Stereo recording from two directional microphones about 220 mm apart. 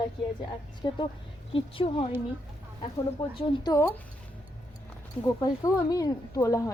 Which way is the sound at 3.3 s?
15° left (ahead or behind).